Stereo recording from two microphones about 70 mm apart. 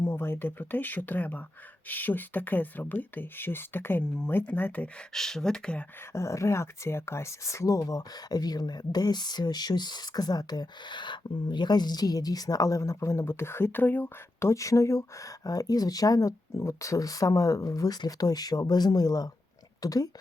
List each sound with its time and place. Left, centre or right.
0.0 s speech: left
5.1 s speech: centre
6.1 s speech: left
14.3 s speech: left
15.4 s speech: left
16.6 s speech: left